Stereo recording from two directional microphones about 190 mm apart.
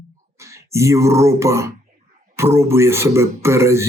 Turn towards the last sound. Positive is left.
turn(degrees=-15)  # may be behind; listen again after turning